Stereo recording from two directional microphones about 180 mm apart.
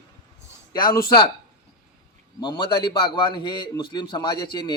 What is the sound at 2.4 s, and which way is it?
A man's voice, 25° left (ahead or behind).